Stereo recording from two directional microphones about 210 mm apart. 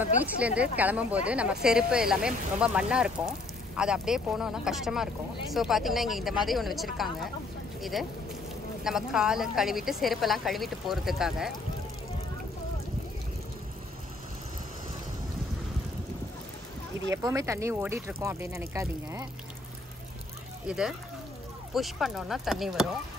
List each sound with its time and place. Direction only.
0.2 s speech: 5° right (ahead or behind)
17.1 s speech: 15° right (ahead or behind)
20.6 s speech: 5° right (ahead or behind)